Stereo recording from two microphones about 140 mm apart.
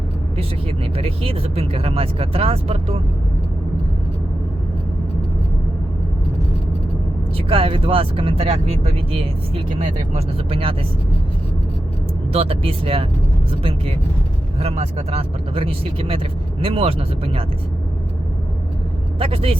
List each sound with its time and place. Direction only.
0.9 s speech: 45° right (ahead or behind)
7.3 s speech: 40° right (ahead or behind)
12.3 s speech: 45° right (ahead or behind)
19.2 s speech: 40° right (ahead or behind)